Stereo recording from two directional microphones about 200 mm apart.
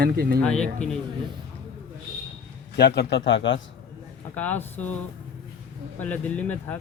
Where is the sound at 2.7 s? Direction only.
55° left (ahead or behind).